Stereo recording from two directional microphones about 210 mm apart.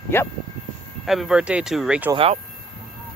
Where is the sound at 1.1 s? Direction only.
Centre (ahead or behind).